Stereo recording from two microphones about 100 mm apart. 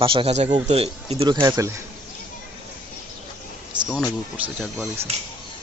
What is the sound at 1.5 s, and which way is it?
Speech, 35° right (ahead or behind).